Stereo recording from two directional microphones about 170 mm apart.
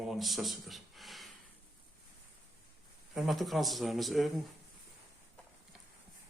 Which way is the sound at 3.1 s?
Centre (ahead or behind).